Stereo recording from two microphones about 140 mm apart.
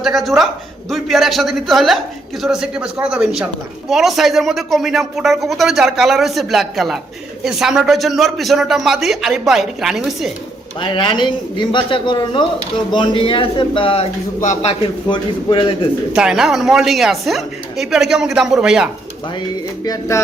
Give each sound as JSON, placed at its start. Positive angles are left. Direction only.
{"t": 0.0, "sound": "a man's voice", "side_deg": 0}
{"t": 10.8, "sound": "a man's voice", "side_deg": 35}
{"t": 15.1, "sound": "a man's voice", "side_deg": 35}
{"t": 16.1, "sound": "a man's voice", "side_deg": -5}
{"t": 19.8, "sound": "speech", "side_deg": 25}